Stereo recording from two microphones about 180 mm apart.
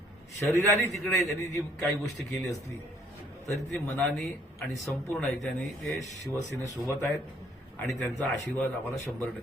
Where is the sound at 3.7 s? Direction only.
Centre (ahead or behind).